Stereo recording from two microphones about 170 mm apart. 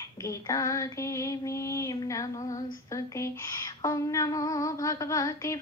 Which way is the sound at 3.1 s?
20° left (ahead or behind).